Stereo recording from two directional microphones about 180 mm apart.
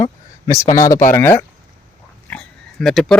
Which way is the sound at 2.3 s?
5° left (ahead or behind).